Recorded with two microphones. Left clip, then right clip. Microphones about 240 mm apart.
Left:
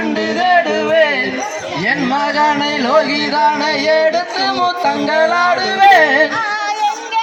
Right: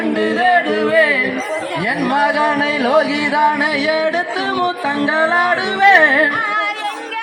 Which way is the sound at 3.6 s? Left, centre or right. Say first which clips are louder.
Left 3 dB; centre.